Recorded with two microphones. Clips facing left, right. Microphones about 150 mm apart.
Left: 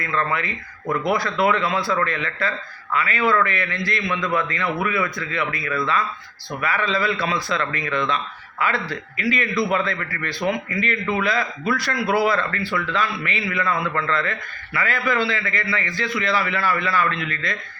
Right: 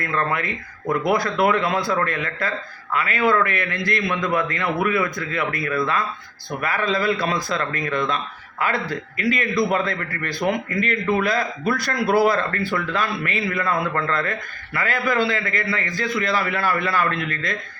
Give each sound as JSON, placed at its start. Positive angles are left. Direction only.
{"t": 1.1, "sound": "speech", "side_deg": -45}